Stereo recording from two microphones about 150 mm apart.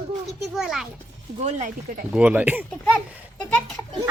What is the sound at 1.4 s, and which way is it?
Speech, 50° right (ahead or behind).